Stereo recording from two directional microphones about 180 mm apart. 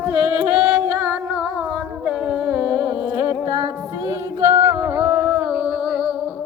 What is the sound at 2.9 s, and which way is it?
Music, 5° right (ahead or behind).